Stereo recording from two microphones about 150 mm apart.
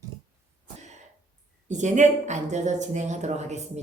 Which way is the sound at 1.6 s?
55° right (ahead or behind).